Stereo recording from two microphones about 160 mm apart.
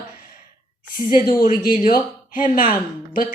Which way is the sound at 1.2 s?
70° left (ahead or behind).